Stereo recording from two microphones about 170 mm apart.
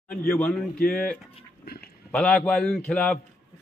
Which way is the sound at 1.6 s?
65° left (ahead or behind).